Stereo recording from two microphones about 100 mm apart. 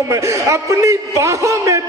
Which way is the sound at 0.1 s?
30° right (ahead or behind).